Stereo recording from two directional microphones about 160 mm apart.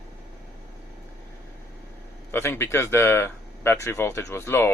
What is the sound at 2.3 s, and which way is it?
Speech, 15° left (ahead or behind).